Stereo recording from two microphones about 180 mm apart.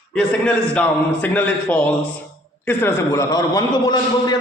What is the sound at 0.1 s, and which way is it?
A man's voice, 5° left (ahead or behind).